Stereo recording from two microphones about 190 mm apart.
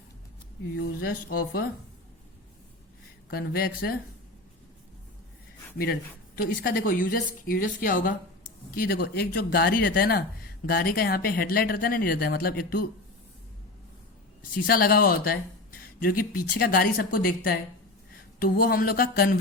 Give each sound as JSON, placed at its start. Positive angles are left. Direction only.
{"t": 1.0, "sound": "speech", "side_deg": 50}
{"t": 3.2, "sound": "speech", "side_deg": 50}
{"t": 5.7, "sound": "speech", "side_deg": 55}
{"t": 14.5, "sound": "speech", "side_deg": 50}